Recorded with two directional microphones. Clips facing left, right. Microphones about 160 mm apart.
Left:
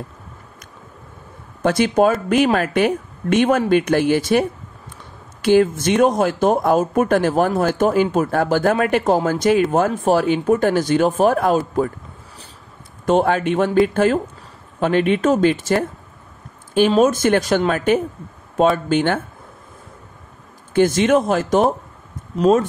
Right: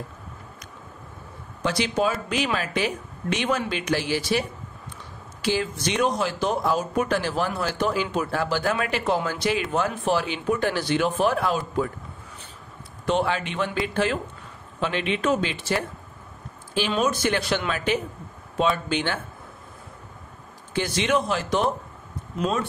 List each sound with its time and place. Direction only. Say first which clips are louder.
1.6 s speech: left 8 dB; 50° left (ahead or behind)
13.0 s speech: left 8 dB; 45° left (ahead or behind)
20.7 s speech: left 9 dB; 45° left (ahead or behind)